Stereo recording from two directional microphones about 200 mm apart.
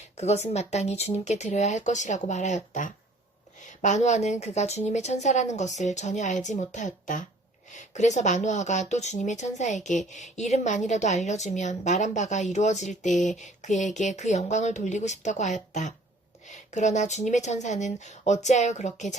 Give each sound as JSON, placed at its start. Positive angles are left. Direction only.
{"t": 0.2, "sound": "a woman's voice", "side_deg": 35}